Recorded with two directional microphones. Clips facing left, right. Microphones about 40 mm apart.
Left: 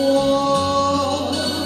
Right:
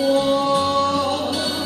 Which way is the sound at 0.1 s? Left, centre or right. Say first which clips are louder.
Even; right.